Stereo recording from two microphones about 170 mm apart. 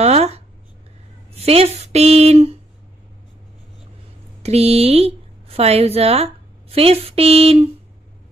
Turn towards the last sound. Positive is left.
turn(degrees=-35)  # may be behind; listen again after turning